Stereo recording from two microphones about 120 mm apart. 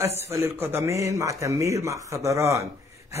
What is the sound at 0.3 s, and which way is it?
A man's voice, 20° right (ahead or behind).